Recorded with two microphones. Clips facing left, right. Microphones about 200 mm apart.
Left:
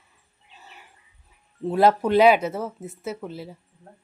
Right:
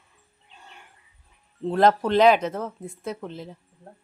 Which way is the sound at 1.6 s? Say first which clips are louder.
Left 1 dB; 5° left (ahead or behind).